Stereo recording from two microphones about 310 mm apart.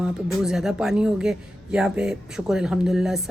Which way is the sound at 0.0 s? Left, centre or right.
Centre.